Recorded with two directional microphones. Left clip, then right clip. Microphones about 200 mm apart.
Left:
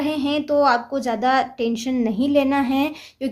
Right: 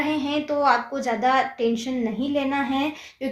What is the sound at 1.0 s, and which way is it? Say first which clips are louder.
Speech: left 1 dB; 30° left (ahead or behind).